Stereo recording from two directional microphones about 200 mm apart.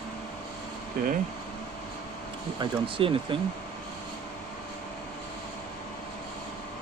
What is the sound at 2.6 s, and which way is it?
Speech, 25° right (ahead or behind).